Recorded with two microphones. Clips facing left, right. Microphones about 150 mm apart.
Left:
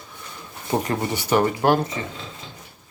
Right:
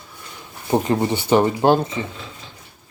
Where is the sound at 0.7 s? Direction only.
25° right (ahead or behind).